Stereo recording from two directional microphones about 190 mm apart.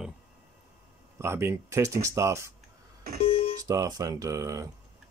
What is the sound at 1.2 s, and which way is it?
Speech, 15° right (ahead or behind).